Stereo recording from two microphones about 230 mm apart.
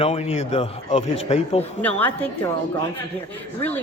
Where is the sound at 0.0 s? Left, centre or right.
Left.